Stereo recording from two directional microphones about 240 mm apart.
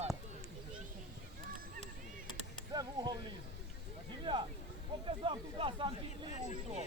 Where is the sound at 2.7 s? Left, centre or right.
Centre.